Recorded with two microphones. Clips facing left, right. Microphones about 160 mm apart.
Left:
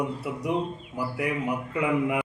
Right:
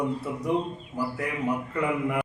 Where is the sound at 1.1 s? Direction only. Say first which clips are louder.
Left 2 dB; 15° left (ahead or behind).